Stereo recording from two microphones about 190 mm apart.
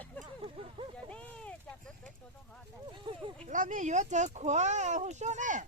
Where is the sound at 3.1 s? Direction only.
20° right (ahead or behind).